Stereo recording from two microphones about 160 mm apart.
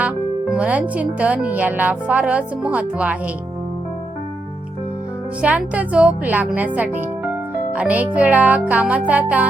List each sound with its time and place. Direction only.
0.0 s speech: 5° right (ahead or behind)
5.4 s speech: 10° right (ahead or behind)